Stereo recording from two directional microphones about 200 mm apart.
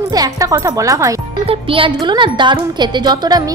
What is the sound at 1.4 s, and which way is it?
A woman's voice, 25° right (ahead or behind).